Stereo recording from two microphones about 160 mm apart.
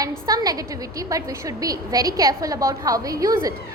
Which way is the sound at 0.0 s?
20° right (ahead or behind).